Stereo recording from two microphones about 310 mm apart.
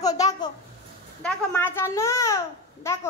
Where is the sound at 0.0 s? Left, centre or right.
Centre.